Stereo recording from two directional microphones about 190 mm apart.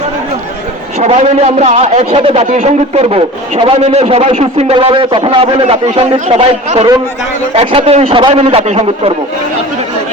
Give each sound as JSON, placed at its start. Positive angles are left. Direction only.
{"t": 0.9, "sound": "a man's voice", "side_deg": -35}